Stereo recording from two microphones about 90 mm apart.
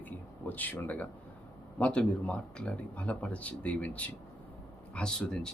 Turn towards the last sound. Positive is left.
turn(degrees=10)  # may be behind; listen again after turning